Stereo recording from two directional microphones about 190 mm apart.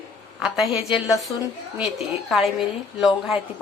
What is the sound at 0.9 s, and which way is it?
Speech, 20° left (ahead or behind).